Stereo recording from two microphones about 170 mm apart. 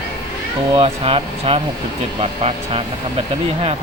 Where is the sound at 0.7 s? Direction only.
35° right (ahead or behind).